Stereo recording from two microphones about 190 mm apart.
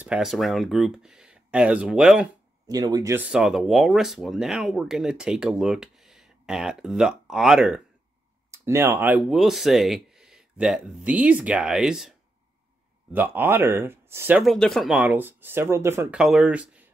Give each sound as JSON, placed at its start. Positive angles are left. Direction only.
{"t": 0.0, "sound": "speech", "side_deg": -5}
{"t": 2.7, "sound": "speech", "side_deg": -20}
{"t": 3.3, "sound": "speech", "side_deg": -5}
{"t": 8.5, "sound": "speech", "side_deg": -15}
{"t": 13.1, "sound": "speech", "side_deg": -10}
{"t": 14.4, "sound": "speech", "side_deg": 0}